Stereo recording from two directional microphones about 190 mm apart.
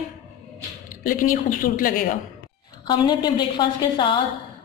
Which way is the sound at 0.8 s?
45° left (ahead or behind).